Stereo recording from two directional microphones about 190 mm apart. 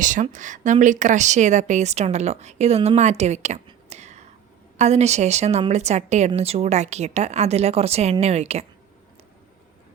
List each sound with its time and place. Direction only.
0.0 s speech: 40° right (ahead or behind)